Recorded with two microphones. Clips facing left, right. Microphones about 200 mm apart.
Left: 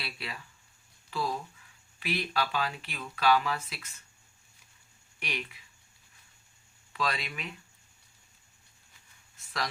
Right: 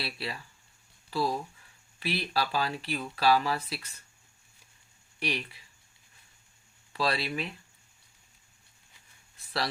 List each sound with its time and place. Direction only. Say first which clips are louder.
0.0 s speech: right 4 dB; 35° right (ahead or behind)
5.2 s speech: right 5 dB; 35° right (ahead or behind)
6.9 s speech: right 4 dB; 35° right (ahead or behind)